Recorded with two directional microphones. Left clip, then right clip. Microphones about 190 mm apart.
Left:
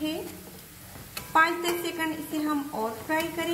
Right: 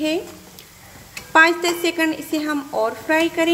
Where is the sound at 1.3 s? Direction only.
45° right (ahead or behind).